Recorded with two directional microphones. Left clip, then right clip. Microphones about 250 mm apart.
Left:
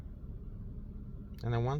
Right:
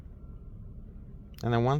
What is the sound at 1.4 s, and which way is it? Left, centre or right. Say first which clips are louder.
Speech: right 8 dB; right.